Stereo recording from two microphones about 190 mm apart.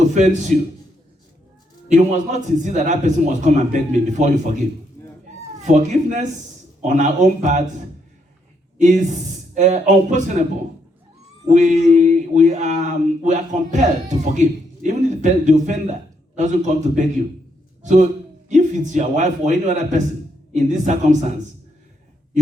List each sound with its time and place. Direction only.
0.1 s a man's voice: 40° right (ahead or behind)
1.9 s speech: 40° right (ahead or behind)
5.0 s a sound: 10° left (ahead or behind)
5.5 s speech: 40° right (ahead or behind)
8.8 s speech: 40° right (ahead or behind)
11.4 s speech: 40° right (ahead or behind)
18.4 s speech: 40° right (ahead or behind)